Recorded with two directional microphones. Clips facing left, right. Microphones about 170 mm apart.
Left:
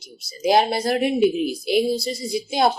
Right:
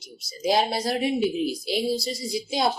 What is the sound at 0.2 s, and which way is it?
A woman's voice, 60° left (ahead or behind).